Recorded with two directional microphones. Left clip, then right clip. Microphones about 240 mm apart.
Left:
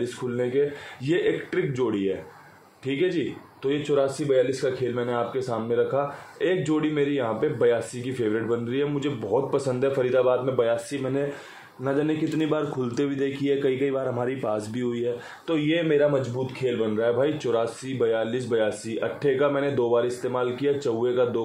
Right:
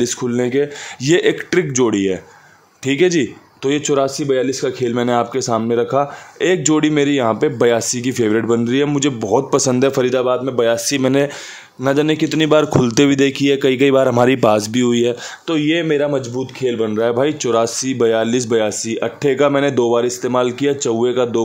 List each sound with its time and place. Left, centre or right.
0.0 s a man's voice: right